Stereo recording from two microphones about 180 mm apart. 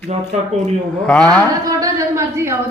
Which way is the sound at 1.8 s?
15° right (ahead or behind).